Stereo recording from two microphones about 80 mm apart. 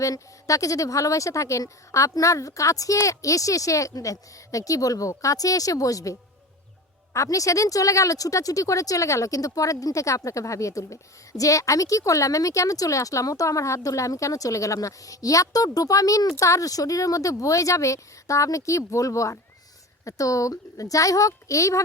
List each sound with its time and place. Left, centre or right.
0.0 s speech: left